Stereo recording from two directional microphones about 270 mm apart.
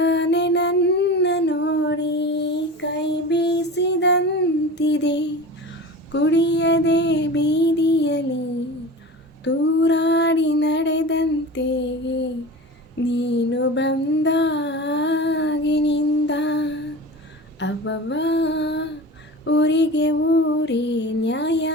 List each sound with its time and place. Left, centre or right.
0.0 s a sound: left
4.7 s music: left
9.4 s female singing: left
13.1 s music: left
17.6 s female singing: left